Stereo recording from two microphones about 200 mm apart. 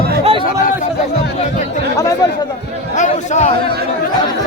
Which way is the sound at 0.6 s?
40° left (ahead or behind).